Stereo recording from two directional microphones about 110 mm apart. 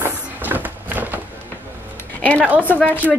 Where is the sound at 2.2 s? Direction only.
15° left (ahead or behind).